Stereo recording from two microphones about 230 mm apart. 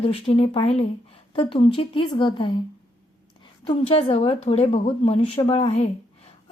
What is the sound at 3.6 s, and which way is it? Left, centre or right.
Speech, left.